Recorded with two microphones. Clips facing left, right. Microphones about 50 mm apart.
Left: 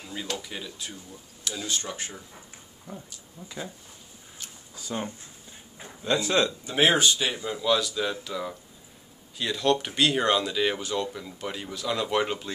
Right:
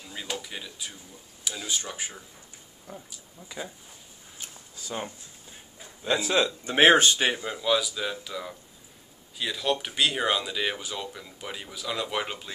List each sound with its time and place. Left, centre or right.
0.1 s speech: centre
4.7 s speech: centre
6.6 s speech: right
7.3 s speech: centre